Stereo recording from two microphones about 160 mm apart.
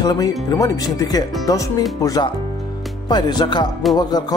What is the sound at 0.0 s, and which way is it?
Speech, 25° left (ahead or behind).